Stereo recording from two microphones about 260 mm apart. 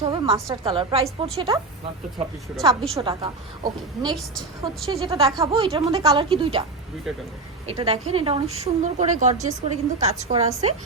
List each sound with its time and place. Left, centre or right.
0.0 s a woman's voice: centre
2.6 s a woman's voice: centre
7.7 s a woman's voice: right